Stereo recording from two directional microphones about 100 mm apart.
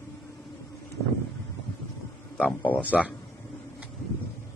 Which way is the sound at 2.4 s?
15° left (ahead or behind).